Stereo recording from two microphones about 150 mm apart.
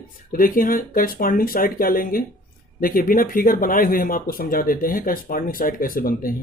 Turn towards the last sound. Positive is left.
turn(degrees=70)  # may be behind; listen again after turning